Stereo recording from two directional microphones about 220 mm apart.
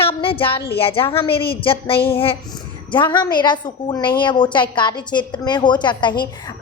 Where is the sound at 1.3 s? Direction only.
45° left (ahead or behind).